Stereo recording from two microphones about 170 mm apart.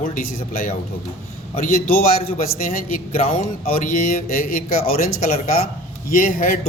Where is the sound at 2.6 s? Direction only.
50° left (ahead or behind).